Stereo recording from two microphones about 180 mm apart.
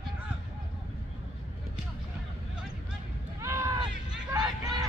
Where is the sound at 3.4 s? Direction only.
15° right (ahead or behind).